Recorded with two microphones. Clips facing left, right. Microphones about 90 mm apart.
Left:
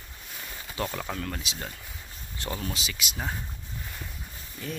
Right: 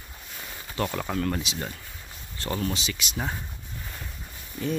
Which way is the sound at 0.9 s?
5° right (ahead or behind).